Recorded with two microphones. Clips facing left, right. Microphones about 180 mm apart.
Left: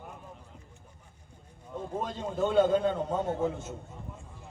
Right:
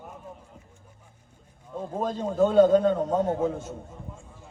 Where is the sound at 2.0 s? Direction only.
40° right (ahead or behind).